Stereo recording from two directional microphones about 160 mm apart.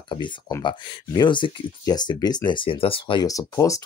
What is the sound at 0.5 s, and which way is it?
Speech, 20° left (ahead or behind).